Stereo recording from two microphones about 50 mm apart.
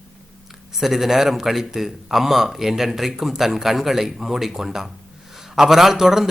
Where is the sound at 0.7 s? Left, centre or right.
Centre.